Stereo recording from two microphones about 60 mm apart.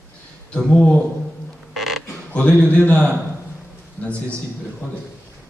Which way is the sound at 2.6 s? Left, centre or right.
Left.